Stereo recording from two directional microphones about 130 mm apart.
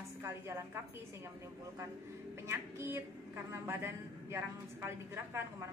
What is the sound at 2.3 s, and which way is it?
A woman's voice, 20° right (ahead or behind).